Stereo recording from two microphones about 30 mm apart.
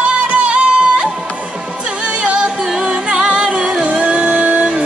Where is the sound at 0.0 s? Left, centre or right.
Right.